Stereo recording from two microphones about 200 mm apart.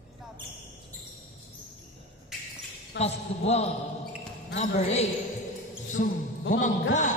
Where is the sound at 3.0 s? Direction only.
30° left (ahead or behind).